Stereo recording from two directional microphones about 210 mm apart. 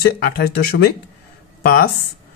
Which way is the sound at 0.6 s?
45° left (ahead or behind).